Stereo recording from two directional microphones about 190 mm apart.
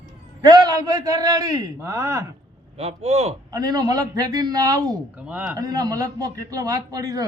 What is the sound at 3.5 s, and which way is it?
A man's voice, 20° right (ahead or behind).